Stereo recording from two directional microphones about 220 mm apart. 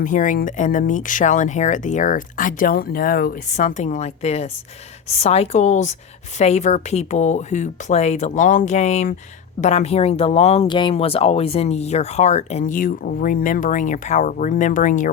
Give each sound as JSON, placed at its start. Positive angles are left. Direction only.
{"t": 0.0, "sound": "speech", "side_deg": 35}